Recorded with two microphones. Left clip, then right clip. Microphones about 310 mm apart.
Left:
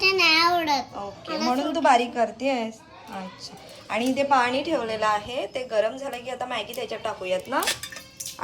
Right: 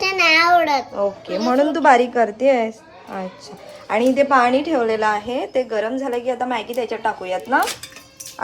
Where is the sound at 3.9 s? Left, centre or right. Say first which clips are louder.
Right 7 dB; centre.